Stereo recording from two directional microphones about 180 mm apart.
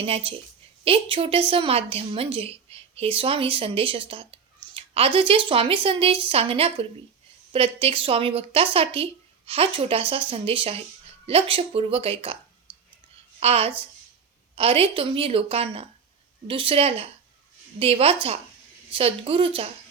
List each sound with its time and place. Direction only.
0.0 s a woman's voice: 30° right (ahead or behind)
13.4 s a woman's voice: 35° right (ahead or behind)